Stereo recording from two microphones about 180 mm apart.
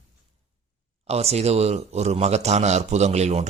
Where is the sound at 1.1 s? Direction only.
35° right (ahead or behind).